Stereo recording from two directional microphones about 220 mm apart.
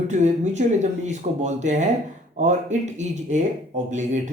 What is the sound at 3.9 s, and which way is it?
Speech, 35° right (ahead or behind).